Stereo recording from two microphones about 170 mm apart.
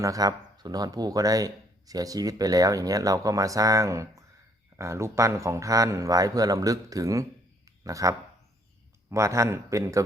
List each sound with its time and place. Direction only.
0.0 s a man's voice: 20° right (ahead or behind)